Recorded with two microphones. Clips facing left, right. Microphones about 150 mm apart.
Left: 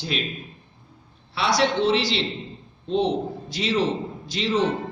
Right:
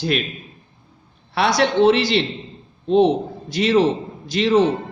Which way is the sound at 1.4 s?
55° right (ahead or behind).